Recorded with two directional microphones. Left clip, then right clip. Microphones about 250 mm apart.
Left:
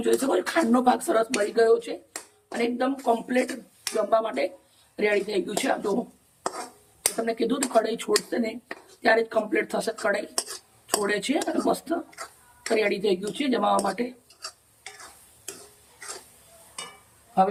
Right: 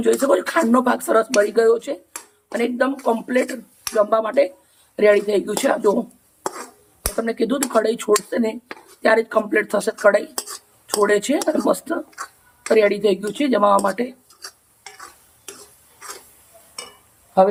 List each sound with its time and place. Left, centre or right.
0.0 s speech: centre
7.3 s speech: centre